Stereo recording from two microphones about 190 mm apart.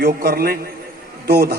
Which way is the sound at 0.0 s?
55° right (ahead or behind).